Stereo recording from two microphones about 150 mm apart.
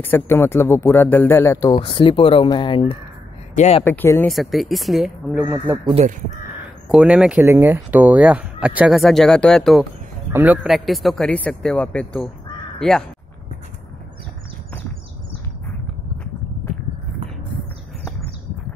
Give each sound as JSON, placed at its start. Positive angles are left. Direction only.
{"t": 0.0, "sound": "speech", "side_deg": 15}
{"t": 1.8, "sound": "speech", "side_deg": 35}
{"t": 3.5, "sound": "speech", "side_deg": 50}
{"t": 3.8, "sound": "speech", "side_deg": 15}
{"t": 4.3, "sound": "speech", "side_deg": 0}
{"t": 5.4, "sound": "speech", "side_deg": -15}
{"t": 6.9, "sound": "speech", "side_deg": -5}
{"t": 7.4, "sound": "speech", "side_deg": -15}
{"t": 10.3, "sound": "speech", "side_deg": -10}
{"t": 10.7, "sound": "speech", "side_deg": 0}